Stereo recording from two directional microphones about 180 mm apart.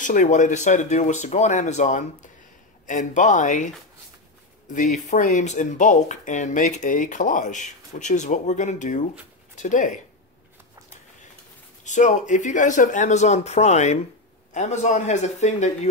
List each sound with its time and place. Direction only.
0.0 s speech: 45° left (ahead or behind)
4.7 s speech: 40° left (ahead or behind)
11.8 s speech: 40° left (ahead or behind)